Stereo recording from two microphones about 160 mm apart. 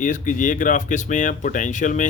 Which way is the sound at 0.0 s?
55° left (ahead or behind).